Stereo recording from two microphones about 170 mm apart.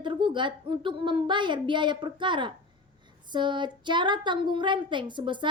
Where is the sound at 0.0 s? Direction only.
30° right (ahead or behind).